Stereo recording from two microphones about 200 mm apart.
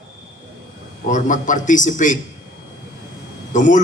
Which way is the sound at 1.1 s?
40° left (ahead or behind).